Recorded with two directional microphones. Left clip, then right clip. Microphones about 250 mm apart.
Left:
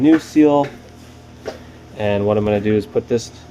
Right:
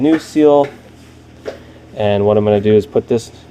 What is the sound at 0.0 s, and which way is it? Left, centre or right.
Speech, centre.